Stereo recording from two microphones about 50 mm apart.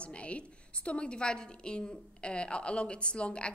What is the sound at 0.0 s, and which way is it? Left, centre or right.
A woman's voice, left.